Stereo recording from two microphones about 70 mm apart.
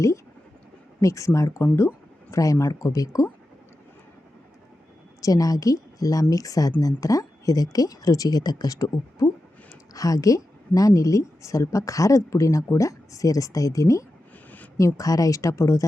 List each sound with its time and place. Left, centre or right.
1.0 s a woman's voice: left
5.2 s speech: left
7.0 s a woman's voice: left